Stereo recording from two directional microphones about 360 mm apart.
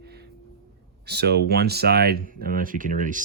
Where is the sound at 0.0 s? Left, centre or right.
Right.